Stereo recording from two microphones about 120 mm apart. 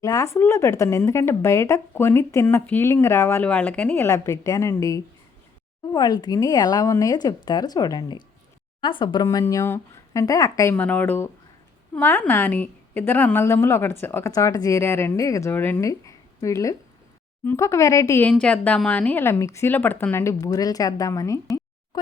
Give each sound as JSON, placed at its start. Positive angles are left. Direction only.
{"t": 0.0, "sound": "a woman's voice", "side_deg": 25}
{"t": 9.2, "sound": "a woman's voice", "side_deg": 30}
{"t": 18.2, "sound": "a woman's voice", "side_deg": 10}